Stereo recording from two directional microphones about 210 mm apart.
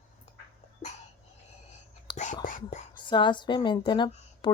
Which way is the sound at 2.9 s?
20° left (ahead or behind).